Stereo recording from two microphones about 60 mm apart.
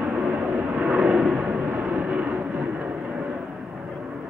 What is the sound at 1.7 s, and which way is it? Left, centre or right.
Vehicle, centre.